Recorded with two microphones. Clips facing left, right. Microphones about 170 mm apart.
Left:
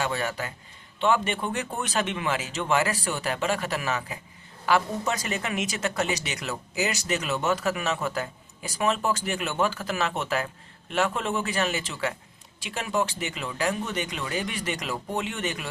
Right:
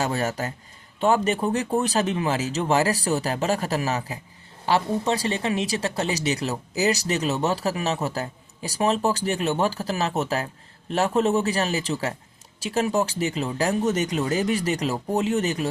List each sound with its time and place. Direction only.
0.0 s speech: 40° right (ahead or behind)